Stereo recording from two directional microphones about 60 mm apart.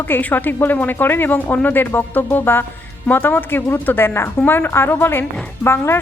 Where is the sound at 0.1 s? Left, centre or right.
Left.